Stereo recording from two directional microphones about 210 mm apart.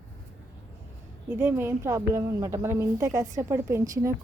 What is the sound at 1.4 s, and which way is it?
A woman's voice, 10° right (ahead or behind).